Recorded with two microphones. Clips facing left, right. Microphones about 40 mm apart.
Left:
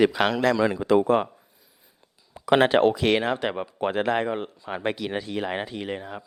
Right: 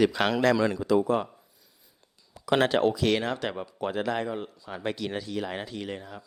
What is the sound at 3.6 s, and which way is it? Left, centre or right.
A man's voice, left.